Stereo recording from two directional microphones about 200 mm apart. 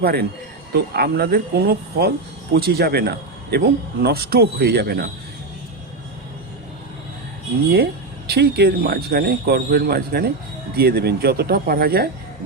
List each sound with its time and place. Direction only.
0.0 s a man's voice: 50° right (ahead or behind)
8.3 s a man's voice: 55° right (ahead or behind)